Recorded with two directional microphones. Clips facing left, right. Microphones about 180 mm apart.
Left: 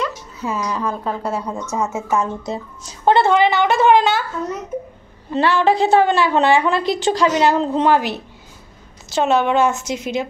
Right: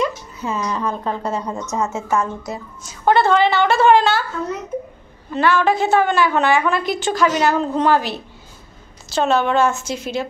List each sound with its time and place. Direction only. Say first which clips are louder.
0.4 s a woman's voice: even; 10° left (ahead or behind)
5.3 s a woman's voice: left 1 dB; 30° left (ahead or behind)